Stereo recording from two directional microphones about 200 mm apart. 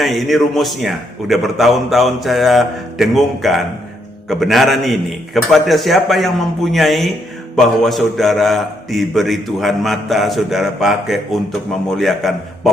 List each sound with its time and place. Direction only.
0.0 s a man's voice: centre (ahead or behind)